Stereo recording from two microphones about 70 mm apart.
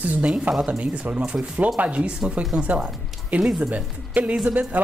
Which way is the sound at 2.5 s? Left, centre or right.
Centre.